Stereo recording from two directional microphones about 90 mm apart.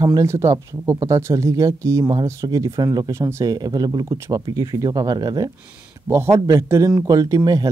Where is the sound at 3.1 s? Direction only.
30° right (ahead or behind).